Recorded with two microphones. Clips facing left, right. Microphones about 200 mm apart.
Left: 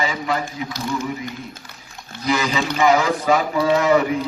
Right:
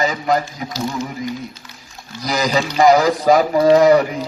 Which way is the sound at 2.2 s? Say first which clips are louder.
Right 2 dB; 40° right (ahead or behind).